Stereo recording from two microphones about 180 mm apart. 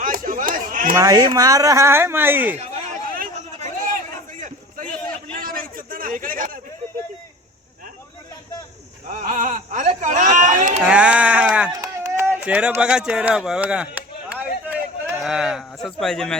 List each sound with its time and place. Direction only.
0.0 s chatter: 50° right (ahead or behind)
0.9 s speech: 20° right (ahead or behind)
3.1 s chatter: 50° right (ahead or behind)
4.4 s a sound: 45° right (ahead or behind)
9.0 s speech: 45° right (ahead or behind)
10.8 s speech: 5° right (ahead or behind)
11.8 s run: 20° right (ahead or behind)
15.2 s speech: centre (ahead or behind)